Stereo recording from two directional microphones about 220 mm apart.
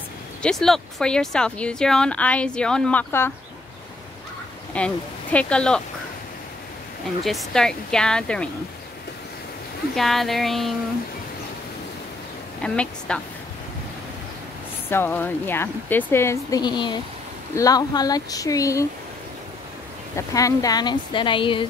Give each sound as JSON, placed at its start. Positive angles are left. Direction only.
{"t": 0.4, "sound": "speech", "side_deg": 0}
{"t": 4.7, "sound": "speech", "side_deg": 5}
{"t": 7.2, "sound": "speech", "side_deg": 0}
{"t": 9.9, "sound": "speech", "side_deg": 0}
{"t": 12.6, "sound": "speech", "side_deg": 5}
{"t": 14.9, "sound": "speech", "side_deg": 10}
{"t": 20.2, "sound": "speech", "side_deg": 15}